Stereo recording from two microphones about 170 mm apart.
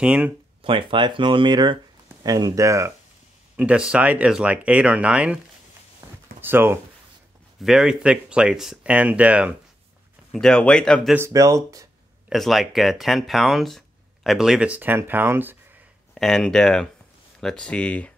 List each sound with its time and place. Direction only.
0.0 s speech: 5° right (ahead or behind)
0.6 s speech: 30° right (ahead or behind)
3.5 s speech: 5° right (ahead or behind)
6.0 s a sound: 25° right (ahead or behind)
6.4 s speech: 15° right (ahead or behind)
10.3 s speech: 5° left (ahead or behind)
11.1 s speech: 15° right (ahead or behind)
12.3 s speech: centre (ahead or behind)
16.2 s speech: centre (ahead or behind)